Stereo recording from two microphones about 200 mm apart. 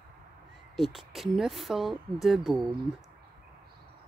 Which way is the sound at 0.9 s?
Centre (ahead or behind).